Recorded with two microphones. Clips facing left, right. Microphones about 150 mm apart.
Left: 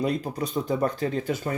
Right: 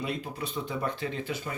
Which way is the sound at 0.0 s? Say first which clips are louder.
Left 7 dB; 40° left (ahead or behind).